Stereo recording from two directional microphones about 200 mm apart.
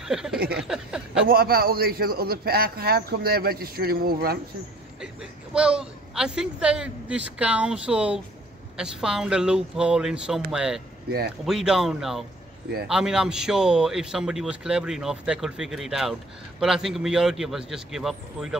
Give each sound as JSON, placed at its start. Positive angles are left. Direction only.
{"t": 0.0, "sound": "a sound", "side_deg": -5}
{"t": 0.6, "sound": "a man's voice", "side_deg": -5}
{"t": 1.3, "sound": "a man's voice", "side_deg": -50}
{"t": 5.0, "sound": "a man's voice", "side_deg": -5}
{"t": 11.1, "sound": "a man's voice", "side_deg": -50}
{"t": 11.4, "sound": "a man's voice", "side_deg": 0}